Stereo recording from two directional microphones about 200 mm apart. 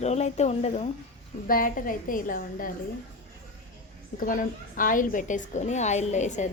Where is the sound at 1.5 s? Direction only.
45° left (ahead or behind).